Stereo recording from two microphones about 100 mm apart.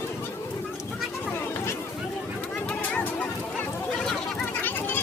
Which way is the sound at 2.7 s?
15° left (ahead or behind).